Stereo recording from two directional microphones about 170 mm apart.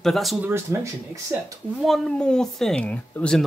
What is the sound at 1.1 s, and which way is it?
Speech, 20° right (ahead or behind).